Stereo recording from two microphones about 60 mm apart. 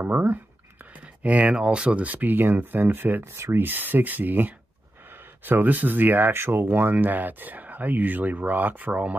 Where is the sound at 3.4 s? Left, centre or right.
Right.